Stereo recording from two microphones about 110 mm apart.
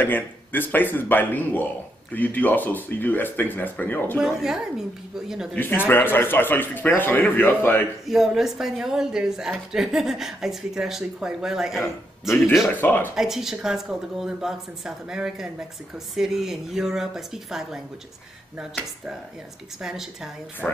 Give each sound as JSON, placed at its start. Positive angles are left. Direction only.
{"t": 0.0, "sound": "speech", "side_deg": 20}
{"t": 4.2, "sound": "a woman's voice", "side_deg": -5}
{"t": 5.5, "sound": "a man's voice", "side_deg": 20}
{"t": 8.1, "sound": "a woman's voice", "side_deg": 0}
{"t": 12.6, "sound": "a man's voice", "side_deg": 20}
{"t": 13.1, "sound": "a woman's voice", "side_deg": -5}
{"t": 19.8, "sound": "a woman's voice", "side_deg": -5}